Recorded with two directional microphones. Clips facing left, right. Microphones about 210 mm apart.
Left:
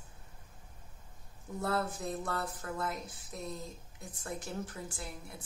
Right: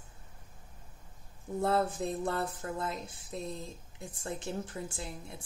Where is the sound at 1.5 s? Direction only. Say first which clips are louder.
Right 5 dB; 25° right (ahead or behind).